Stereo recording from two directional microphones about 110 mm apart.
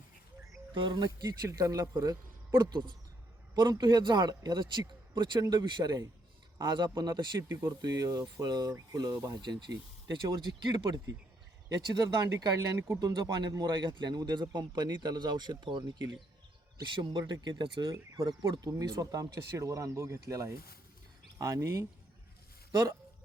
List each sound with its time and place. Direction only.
0.7 s speech: 45° right (ahead or behind)
7.4 s speech: 20° right (ahead or behind)
7.8 s speech: 35° right (ahead or behind)
17.9 s speech: 30° right (ahead or behind)